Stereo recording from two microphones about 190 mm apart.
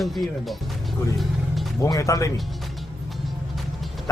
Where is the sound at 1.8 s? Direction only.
15° left (ahead or behind).